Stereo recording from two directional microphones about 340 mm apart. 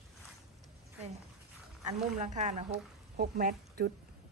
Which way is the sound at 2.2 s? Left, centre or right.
Right.